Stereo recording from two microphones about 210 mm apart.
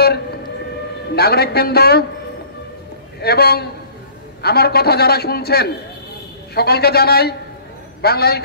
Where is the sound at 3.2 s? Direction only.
50° left (ahead or behind).